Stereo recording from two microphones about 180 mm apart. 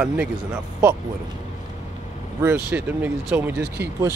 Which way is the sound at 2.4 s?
10° right (ahead or behind).